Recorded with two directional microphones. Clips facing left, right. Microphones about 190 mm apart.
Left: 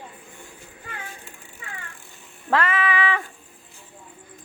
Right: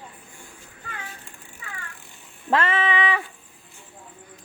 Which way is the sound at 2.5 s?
25° right (ahead or behind).